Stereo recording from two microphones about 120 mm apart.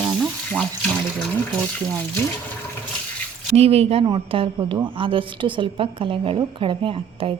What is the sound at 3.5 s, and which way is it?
Speech, 60° right (ahead or behind).